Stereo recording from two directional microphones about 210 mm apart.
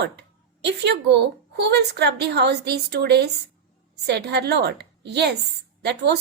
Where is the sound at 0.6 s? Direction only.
55° right (ahead or behind).